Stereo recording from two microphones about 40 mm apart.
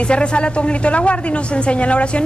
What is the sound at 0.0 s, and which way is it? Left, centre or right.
A woman's voice, left.